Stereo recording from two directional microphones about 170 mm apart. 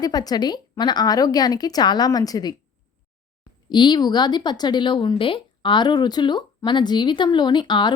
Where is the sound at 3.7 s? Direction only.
25° left (ahead or behind).